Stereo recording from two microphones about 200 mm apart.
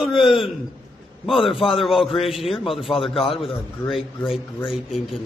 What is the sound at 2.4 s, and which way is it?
Speech, 25° left (ahead or behind).